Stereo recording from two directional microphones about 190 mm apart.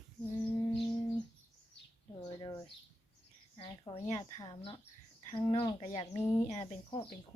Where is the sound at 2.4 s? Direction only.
20° left (ahead or behind); by 7.0 s 35° left (ahead or behind).